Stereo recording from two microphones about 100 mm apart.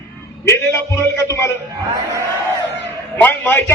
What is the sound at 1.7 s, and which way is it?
Speech, 35° right (ahead or behind).